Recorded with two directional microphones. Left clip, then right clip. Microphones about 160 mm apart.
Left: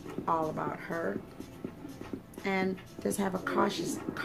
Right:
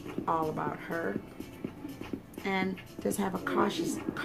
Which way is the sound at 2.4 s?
10° left (ahead or behind).